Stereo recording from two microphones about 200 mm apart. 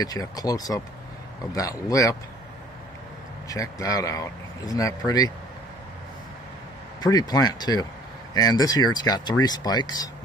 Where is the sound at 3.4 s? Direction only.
15° left (ahead or behind).